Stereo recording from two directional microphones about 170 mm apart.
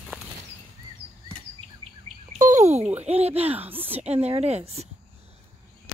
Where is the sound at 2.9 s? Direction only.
40° right (ahead or behind).